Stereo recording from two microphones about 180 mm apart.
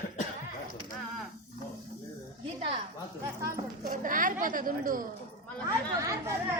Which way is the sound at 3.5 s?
50° right (ahead or behind).